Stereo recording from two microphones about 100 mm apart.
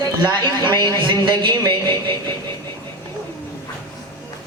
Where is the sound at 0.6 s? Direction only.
45° right (ahead or behind).